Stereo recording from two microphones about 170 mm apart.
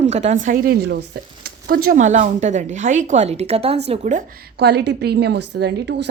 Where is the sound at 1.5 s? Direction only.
60° right (ahead or behind); by 4.2 s 40° right (ahead or behind).